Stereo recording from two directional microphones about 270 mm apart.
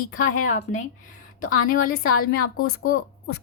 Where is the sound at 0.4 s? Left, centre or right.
Left.